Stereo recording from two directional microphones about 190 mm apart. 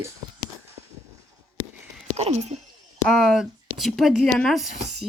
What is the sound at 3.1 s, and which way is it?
Speech, centre (ahead or behind).